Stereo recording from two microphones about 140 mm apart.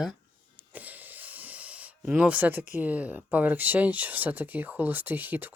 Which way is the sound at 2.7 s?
10° right (ahead or behind).